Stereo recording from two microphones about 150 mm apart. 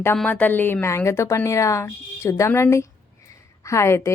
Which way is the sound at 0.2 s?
10° left (ahead or behind).